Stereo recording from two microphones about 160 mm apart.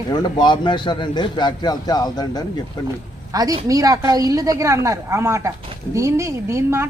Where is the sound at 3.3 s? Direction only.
20° right (ahead or behind).